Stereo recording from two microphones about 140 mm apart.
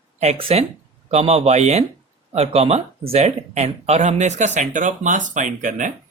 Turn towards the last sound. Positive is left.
turn(degrees=-70)  # may be behind; listen again after turning